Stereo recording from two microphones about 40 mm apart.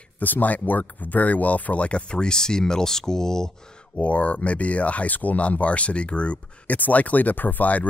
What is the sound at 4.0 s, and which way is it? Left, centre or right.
Speech, left.